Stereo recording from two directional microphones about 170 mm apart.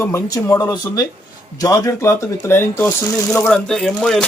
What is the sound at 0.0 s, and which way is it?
A man's voice, 20° left (ahead or behind).